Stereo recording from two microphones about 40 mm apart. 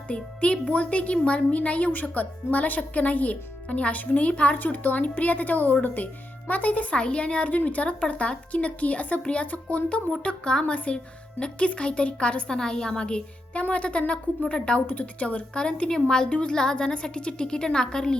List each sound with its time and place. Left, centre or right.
0.1 s speech: left
4.5 s a woman's voice: left
6.9 s a woman's voice: left
10.4 s a woman's voice: left
12.5 s a woman's voice: centre
14.8 s speech: left
16.0 s a woman's voice: centre